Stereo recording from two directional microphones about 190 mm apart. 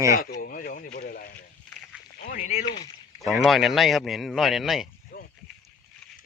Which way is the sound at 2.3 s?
40° left (ahead or behind).